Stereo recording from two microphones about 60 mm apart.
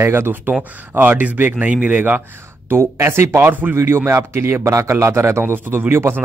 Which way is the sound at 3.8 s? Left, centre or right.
Right.